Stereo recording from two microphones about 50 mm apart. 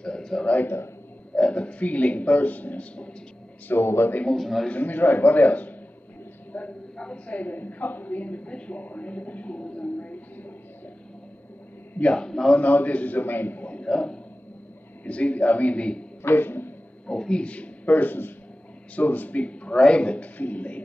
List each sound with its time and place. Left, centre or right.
0.0 s a sound: centre
1.3 s a man's voice: left
3.6 s a man's voice: left
4.3 s a man's voice: centre
4.6 s a man's voice: left
12.0 s a man's voice: centre
12.5 s a man's voice: left
13.8 s a man's voice: centre
16.2 s a sound: left
17.1 s a man's voice: centre; by 20.8 s left